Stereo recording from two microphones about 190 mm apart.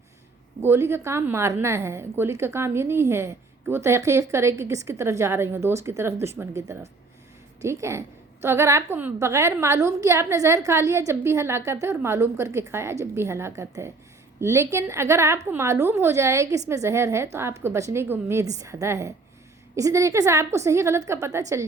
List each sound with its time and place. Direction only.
0.6 s a woman's voice: 15° right (ahead or behind)